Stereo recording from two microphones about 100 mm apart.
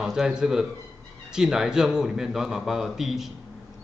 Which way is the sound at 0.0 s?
5° right (ahead or behind).